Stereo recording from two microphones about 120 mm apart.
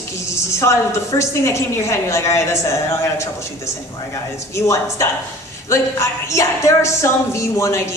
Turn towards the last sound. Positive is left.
turn(degrees=25)  # may be behind; listen again after turning